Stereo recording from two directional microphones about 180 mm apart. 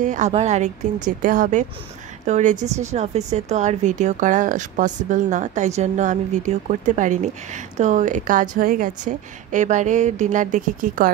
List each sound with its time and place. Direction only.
0.0 s a woman's voice: 40° right (ahead or behind)
1.0 s a woman's voice: 50° right (ahead or behind)